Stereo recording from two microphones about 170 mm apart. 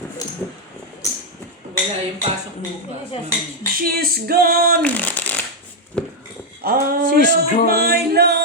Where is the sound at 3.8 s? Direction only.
65° right (ahead or behind).